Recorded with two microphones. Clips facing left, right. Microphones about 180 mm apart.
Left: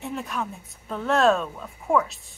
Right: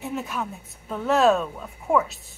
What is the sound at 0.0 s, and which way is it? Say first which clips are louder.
A woman's voice: right 1 dB; centre (ahead or behind).